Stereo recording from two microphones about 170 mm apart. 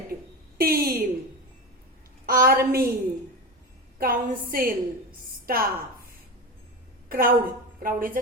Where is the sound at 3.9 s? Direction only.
60° right (ahead or behind).